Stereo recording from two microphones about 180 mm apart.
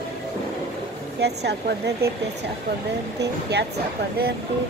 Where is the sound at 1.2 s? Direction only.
65° right (ahead or behind).